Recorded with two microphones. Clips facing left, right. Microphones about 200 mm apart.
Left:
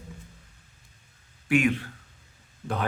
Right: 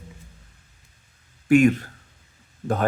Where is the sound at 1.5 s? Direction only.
45° right (ahead or behind).